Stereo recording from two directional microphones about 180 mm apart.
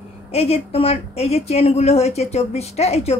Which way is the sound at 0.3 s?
35° left (ahead or behind).